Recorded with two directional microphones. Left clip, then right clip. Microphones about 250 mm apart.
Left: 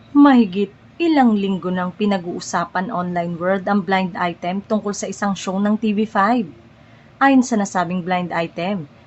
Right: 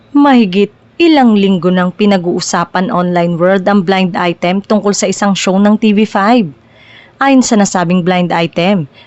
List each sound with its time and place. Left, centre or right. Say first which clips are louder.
0.2 s a woman's voice: right 5 dB; right